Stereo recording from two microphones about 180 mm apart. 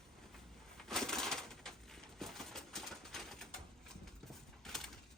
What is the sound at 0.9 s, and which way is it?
Crushing, centre (ahead or behind).